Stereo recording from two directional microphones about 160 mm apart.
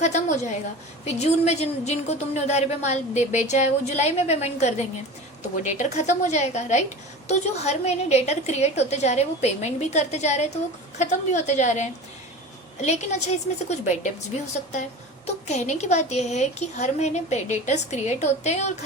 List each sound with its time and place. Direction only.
0.0 s a woman's voice: 45° left (ahead or behind)
15.4 s a woman's voice: 45° left (ahead or behind)